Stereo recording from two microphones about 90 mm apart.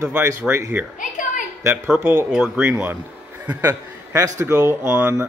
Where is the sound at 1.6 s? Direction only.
30° right (ahead or behind).